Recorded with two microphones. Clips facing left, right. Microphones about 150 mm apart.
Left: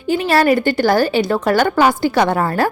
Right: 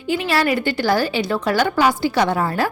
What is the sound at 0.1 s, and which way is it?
A woman's voice, 45° left (ahead or behind).